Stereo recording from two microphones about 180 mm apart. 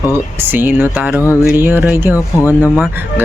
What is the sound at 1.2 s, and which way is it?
Speech, 15° left (ahead or behind).